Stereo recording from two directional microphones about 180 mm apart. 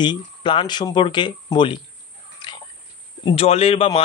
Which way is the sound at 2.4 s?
25° left (ahead or behind).